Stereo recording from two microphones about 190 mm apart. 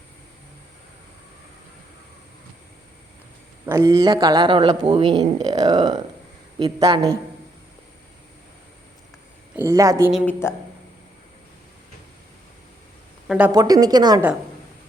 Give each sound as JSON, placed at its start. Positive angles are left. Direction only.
{"t": 3.7, "sound": "a man's voice", "side_deg": -20}
{"t": 9.6, "sound": "a woman's voice", "side_deg": -15}
{"t": 10.4, "sound": "speech", "side_deg": 15}
{"t": 13.2, "sound": "speech", "side_deg": -5}
{"t": 13.5, "sound": "a man's voice", "side_deg": -20}